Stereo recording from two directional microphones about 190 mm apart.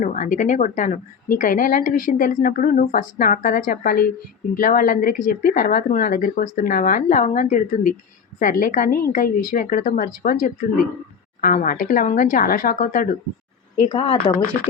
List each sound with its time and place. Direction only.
0.0 s speech: 40° left (ahead or behind)
13.8 s speech: 30° left (ahead or behind)